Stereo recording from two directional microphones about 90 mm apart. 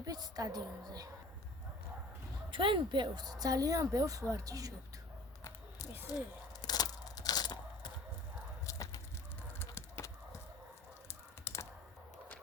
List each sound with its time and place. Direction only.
0.0 s speech: 45° right (ahead or behind)
2.5 s speech: 65° right (ahead or behind); by 4.7 s 40° right (ahead or behind)
5.4 s a sound: 30° left (ahead or behind)
6.1 s crunch: 45° left (ahead or behind)
8.6 s a sound: 35° left (ahead or behind)
11.1 s computer keyboard: 30° left (ahead or behind)